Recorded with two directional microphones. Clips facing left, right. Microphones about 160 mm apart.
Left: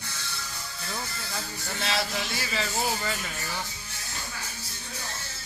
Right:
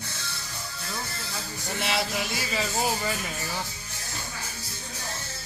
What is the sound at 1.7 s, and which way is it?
Speech, 15° right (ahead or behind).